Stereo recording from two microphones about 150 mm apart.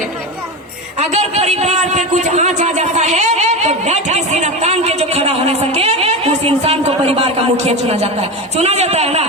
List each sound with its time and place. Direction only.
0.9 s a man's voice: 45° right (ahead or behind)